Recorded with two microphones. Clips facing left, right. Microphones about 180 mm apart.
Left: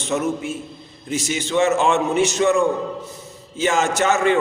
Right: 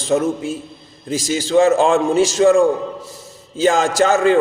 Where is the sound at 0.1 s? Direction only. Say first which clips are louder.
Right 5 dB; 30° right (ahead or behind).